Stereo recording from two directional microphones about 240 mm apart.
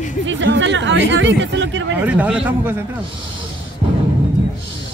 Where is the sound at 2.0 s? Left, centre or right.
Centre.